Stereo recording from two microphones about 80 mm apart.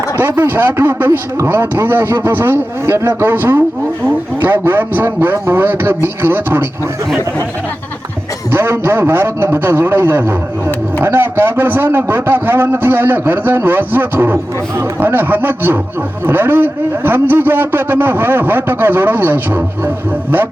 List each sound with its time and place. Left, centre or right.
0.2 s a man's voice: right
8.4 s a man's voice: right